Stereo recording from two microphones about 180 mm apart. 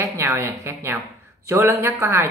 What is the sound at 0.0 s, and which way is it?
A woman's voice, 15° right (ahead or behind).